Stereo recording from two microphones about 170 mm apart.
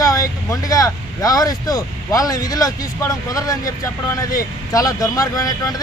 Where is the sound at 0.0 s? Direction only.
20° left (ahead or behind).